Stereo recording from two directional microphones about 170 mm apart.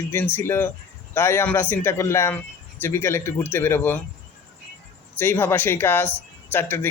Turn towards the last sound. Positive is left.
turn(degrees=10)  # may be behind; listen again after turning